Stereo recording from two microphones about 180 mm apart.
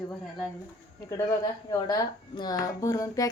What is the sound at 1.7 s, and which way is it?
Speech, 20° left (ahead or behind).